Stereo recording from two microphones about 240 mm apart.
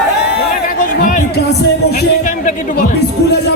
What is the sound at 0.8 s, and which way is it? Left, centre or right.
Music, left.